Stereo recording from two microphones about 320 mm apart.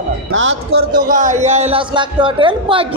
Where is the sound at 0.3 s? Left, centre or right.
Right.